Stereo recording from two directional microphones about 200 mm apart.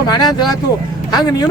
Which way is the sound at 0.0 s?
20° left (ahead or behind).